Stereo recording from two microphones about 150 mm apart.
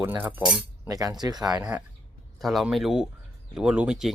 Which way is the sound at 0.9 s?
25° right (ahead or behind).